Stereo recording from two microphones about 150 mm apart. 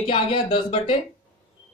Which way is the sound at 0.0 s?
35° left (ahead or behind).